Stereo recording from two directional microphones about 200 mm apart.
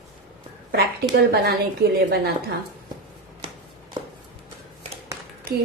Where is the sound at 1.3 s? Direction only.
50° right (ahead or behind).